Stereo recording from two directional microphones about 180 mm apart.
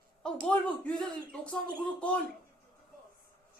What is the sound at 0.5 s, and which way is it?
A man's voice, 5° left (ahead or behind).